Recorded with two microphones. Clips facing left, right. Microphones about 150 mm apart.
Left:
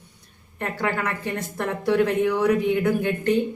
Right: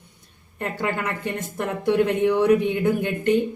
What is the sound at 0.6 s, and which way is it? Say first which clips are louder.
A woman's voice: even; 20° right (ahead or behind).